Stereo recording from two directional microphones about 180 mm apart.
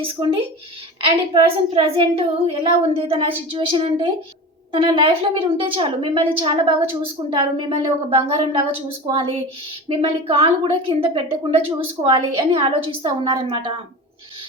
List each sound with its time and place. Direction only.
0.0 s a woman's voice: 30° right (ahead or behind)